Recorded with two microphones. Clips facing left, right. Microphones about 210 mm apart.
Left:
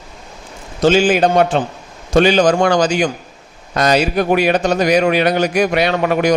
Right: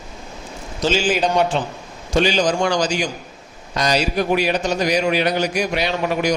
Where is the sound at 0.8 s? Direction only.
55° left (ahead or behind).